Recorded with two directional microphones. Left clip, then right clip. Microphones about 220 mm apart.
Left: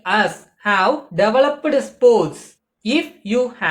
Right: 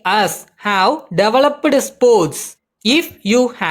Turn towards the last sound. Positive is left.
turn(degrees=-50)  # may be behind; listen again after turning